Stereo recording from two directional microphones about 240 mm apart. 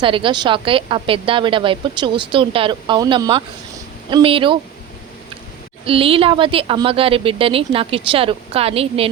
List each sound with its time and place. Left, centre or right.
0.0 s a woman's voice: right
5.8 s a woman's voice: right